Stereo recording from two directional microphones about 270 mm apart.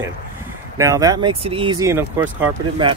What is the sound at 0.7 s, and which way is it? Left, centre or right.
Speech, centre.